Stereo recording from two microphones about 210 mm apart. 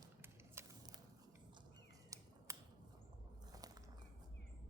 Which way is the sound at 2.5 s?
15° right (ahead or behind).